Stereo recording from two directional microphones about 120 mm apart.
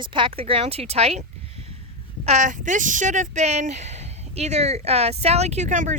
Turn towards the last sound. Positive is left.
turn(degrees=-90)